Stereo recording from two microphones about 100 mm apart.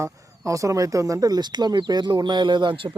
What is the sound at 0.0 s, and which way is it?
Speech, 30° right (ahead or behind).